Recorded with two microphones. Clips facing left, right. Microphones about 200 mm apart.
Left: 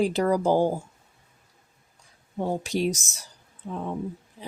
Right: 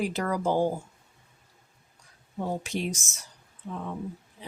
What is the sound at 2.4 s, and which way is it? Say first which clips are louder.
Speech: left 5 dB; 35° left (ahead or behind).